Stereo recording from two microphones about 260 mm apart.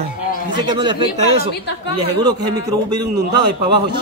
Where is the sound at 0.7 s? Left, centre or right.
Centre.